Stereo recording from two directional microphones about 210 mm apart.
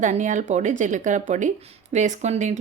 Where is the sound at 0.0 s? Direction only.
35° right (ahead or behind).